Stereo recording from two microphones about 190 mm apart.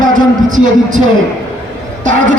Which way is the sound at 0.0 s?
40° right (ahead or behind).